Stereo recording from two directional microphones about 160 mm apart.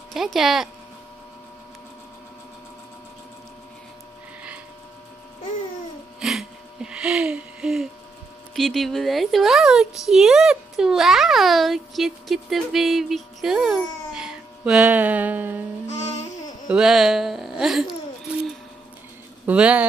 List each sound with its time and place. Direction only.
0.1 s a child's voice: centre (ahead or behind)
6.1 s a sound: 5° right (ahead or behind)
8.5 s a child's voice: centre (ahead or behind)
15.9 s music: 45° left (ahead or behind)
16.6 s a child's voice: 5° right (ahead or behind)
19.4 s speech: 5° right (ahead or behind)